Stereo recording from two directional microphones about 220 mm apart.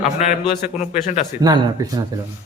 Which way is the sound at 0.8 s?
30° left (ahead or behind).